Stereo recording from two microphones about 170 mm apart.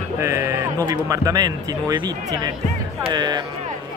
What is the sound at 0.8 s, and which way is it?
Speech, 20° right (ahead or behind).